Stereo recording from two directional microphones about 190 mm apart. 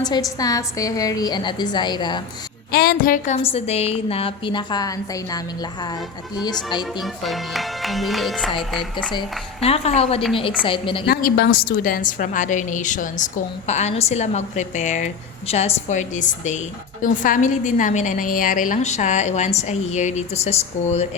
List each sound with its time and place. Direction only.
0.0 s a woman's voice: 20° left (ahead or behind)
2.7 s speech: 50° left (ahead or behind)
3.4 s a woman's voice: 30° left (ahead or behind)
7.0 s speech: centre (ahead or behind)
9.1 s a woman's voice: 30° left (ahead or behind)
11.0 s a woman's voice: 55° left (ahead or behind); by 21.1 s 35° left (ahead or behind)